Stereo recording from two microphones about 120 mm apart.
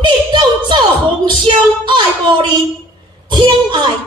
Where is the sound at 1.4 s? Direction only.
40° right (ahead or behind).